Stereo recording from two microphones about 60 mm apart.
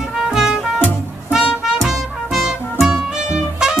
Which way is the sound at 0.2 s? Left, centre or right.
Centre.